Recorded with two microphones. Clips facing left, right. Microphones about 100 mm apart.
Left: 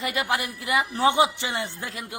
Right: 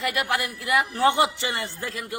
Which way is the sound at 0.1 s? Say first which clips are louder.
Even; 20° left (ahead or behind).